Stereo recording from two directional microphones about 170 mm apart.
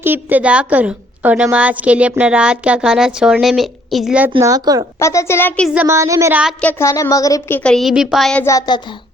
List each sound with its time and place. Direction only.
0.0 s a woman's voice: 10° right (ahead or behind)
4.4 s speech: 20° right (ahead or behind)
4.9 s a woman's voice: 15° left (ahead or behind)
5.6 s a woman's voice: 10° right (ahead or behind)
6.6 s a woman's voice: 10° left (ahead or behind)
8.4 s a woman's voice: 20° left (ahead or behind)